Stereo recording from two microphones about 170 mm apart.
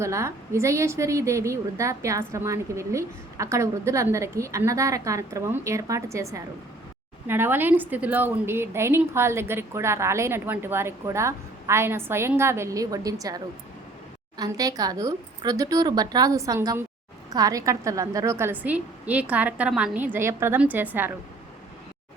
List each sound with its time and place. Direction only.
0.0 s a woman's voice: 15° right (ahead or behind)